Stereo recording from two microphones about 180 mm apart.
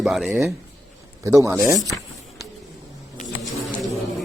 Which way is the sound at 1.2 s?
20° right (ahead or behind).